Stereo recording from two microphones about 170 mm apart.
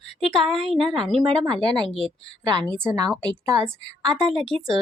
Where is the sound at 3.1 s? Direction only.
5° left (ahead or behind).